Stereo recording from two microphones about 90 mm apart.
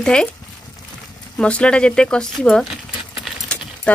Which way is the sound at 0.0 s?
10° left (ahead or behind).